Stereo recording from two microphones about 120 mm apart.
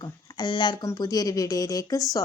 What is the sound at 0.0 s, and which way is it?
Speech, 35° left (ahead or behind).